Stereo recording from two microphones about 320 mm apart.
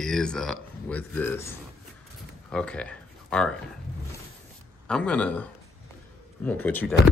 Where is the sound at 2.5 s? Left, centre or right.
Centre.